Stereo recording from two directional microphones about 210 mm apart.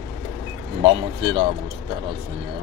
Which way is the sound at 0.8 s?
25° right (ahead or behind).